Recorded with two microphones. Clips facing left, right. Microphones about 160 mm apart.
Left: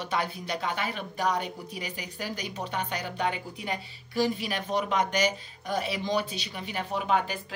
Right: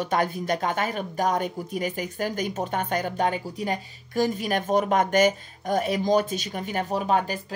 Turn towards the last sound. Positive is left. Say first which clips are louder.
# right 3 dB
turn(degrees=-40)  # may be behind; listen again after turning